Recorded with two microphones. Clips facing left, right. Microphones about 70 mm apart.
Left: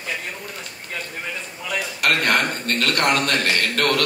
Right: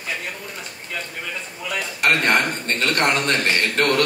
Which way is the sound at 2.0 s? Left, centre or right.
Right.